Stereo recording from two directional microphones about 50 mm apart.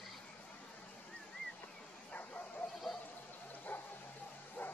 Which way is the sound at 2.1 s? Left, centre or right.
Left.